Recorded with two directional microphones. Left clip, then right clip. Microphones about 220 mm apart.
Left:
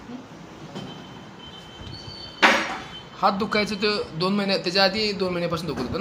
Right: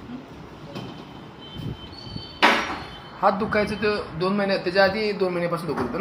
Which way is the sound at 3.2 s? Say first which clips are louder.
Right 1 dB; 45° left (ahead or behind).